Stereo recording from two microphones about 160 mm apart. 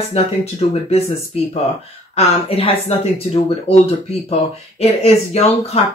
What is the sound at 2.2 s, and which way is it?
Speech, 35° left (ahead or behind).